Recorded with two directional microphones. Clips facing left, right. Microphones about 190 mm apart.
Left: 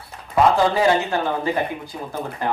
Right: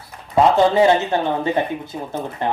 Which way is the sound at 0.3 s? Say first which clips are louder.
Right 3 dB; 25° right (ahead or behind).